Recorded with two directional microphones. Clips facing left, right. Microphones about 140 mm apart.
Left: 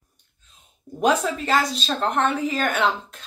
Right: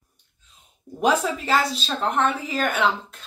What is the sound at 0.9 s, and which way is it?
A woman's voice, 5° right (ahead or behind).